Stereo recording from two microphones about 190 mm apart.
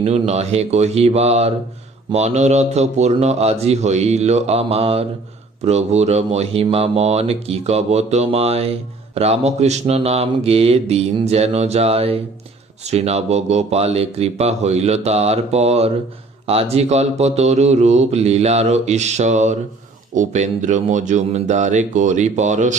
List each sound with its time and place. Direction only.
0.0 s speech: 35° right (ahead or behind)